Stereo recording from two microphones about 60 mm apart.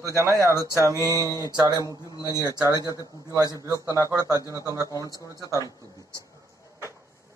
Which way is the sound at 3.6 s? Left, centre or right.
Right.